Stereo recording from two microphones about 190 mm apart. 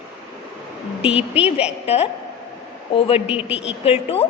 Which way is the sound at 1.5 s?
35° left (ahead or behind).